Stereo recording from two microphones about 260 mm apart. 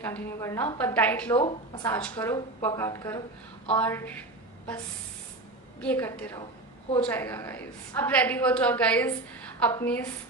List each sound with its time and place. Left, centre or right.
0.0 s a woman's voice: centre
1.4 s a woman's voice: centre
5.8 s a woman's voice: centre